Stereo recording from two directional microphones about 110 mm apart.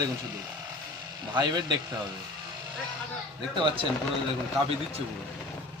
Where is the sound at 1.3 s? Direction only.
40° right (ahead or behind).